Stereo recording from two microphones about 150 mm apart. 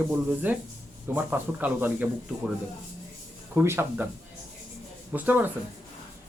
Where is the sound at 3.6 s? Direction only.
15° right (ahead or behind).